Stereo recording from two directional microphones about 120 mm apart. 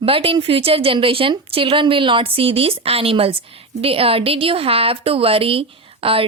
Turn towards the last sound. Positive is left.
turn(degrees=-50)  # may be behind; listen again after turning